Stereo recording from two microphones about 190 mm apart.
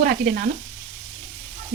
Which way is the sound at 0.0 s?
55° right (ahead or behind).